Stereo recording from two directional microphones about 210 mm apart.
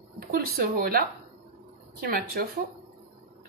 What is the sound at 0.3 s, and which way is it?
A woman's voice, 45° right (ahead or behind).